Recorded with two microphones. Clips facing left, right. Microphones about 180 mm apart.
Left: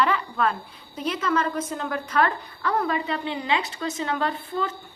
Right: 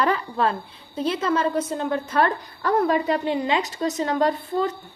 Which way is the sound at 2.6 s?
45° right (ahead or behind).